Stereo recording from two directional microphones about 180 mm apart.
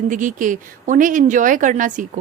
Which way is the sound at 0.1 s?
45° right (ahead or behind).